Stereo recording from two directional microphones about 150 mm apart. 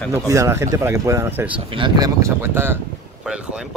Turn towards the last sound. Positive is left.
turn(degrees=-5)  # may be behind; listen again after turning